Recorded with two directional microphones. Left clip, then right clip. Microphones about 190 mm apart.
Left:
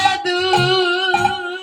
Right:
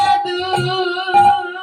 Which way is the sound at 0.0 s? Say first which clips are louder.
Right 1 dB; 25° left (ahead or behind).